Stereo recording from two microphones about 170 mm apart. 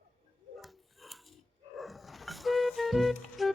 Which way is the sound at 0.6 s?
Centre (ahead or behind).